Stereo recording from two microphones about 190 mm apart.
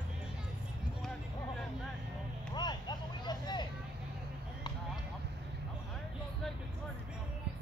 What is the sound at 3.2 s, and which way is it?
Vehicle, 20° left (ahead or behind).